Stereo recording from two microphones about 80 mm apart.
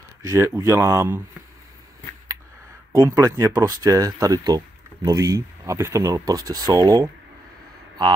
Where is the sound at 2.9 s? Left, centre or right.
Right.